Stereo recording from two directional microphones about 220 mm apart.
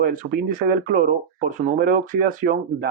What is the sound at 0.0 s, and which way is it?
Speech, 40° right (ahead or behind).